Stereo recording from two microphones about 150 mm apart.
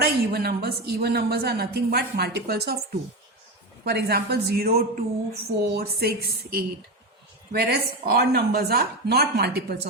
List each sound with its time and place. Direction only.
0.0 s a woman's voice: 90° right
3.8 s a woman's voice: 90° right